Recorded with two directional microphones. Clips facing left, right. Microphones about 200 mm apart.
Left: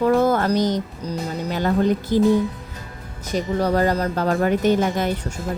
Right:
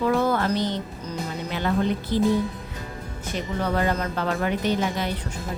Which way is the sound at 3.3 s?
40° left (ahead or behind).